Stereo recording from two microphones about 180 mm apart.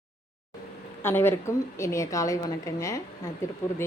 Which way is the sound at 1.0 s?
10° left (ahead or behind).